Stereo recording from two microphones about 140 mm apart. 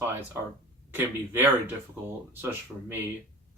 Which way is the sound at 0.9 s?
15° right (ahead or behind).